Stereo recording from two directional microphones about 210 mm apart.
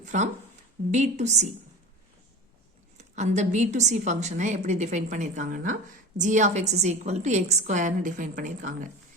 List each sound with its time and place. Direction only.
0.0 s a sound: 35° right (ahead or behind)
0.9 s a woman's voice: 35° right (ahead or behind)
3.0 s a woman's voice: 35° right (ahead or behind)